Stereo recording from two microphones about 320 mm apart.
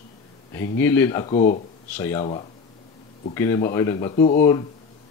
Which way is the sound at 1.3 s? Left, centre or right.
Left.